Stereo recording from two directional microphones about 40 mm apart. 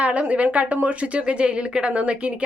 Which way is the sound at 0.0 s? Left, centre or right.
Right.